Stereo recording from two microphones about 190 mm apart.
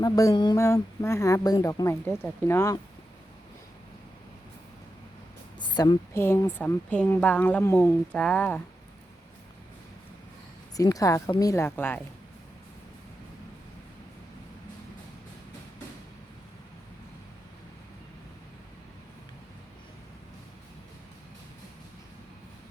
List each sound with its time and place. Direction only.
0.0 s speech: 20° left (ahead or behind)
5.5 s speech: 20° left (ahead or behind)
10.8 s speech: 20° left (ahead or behind)